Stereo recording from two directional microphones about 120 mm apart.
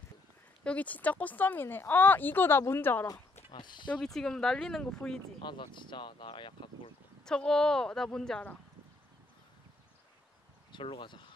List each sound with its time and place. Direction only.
0.7 s speech: 10° left (ahead or behind)
3.4 s speech: 40° left (ahead or behind)
3.9 s a woman's voice: 5° left (ahead or behind)
5.4 s speech: 40° left (ahead or behind)
7.2 s a woman's voice: 5° left (ahead or behind)
10.7 s speech: 45° left (ahead or behind)